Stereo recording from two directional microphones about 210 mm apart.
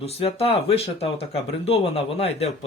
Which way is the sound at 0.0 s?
30° left (ahead or behind).